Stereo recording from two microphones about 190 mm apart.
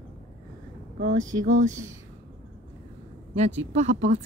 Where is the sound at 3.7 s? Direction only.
40° right (ahead or behind).